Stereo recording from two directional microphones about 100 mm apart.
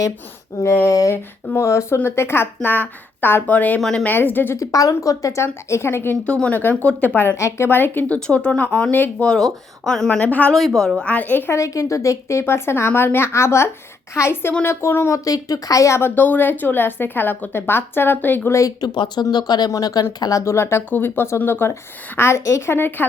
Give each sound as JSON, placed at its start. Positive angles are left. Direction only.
{"t": 0.6, "sound": "a sound", "side_deg": 30}
{"t": 1.1, "sound": "speech", "side_deg": 25}
{"t": 3.8, "sound": "speech", "side_deg": 5}
{"t": 4.0, "sound": "speech", "side_deg": 20}
{"t": 4.5, "sound": "speech", "side_deg": 35}
{"t": 6.2, "sound": "speech", "side_deg": 10}
{"t": 10.5, "sound": "speech", "side_deg": 0}
{"t": 11.5, "sound": "speech", "side_deg": 30}
{"t": 18.9, "sound": "speech", "side_deg": 45}
{"t": 20.4, "sound": "speech", "side_deg": 30}